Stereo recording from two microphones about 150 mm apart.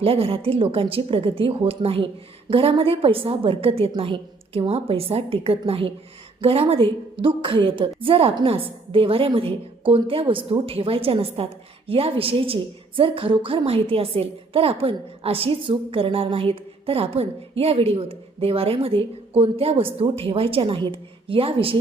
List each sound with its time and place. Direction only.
0.0 s a woman's voice: 40° right (ahead or behind)